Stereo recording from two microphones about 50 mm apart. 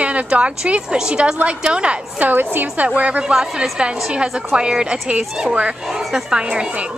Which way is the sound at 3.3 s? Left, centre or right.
Centre.